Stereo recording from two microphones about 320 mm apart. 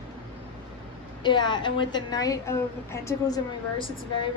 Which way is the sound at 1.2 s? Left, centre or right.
Centre.